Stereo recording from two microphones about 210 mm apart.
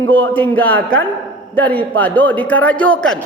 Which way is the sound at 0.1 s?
10° left (ahead or behind).